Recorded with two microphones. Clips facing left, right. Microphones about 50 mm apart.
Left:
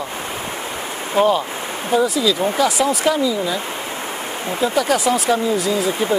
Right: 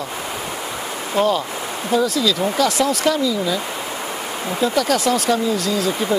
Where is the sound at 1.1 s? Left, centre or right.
Centre.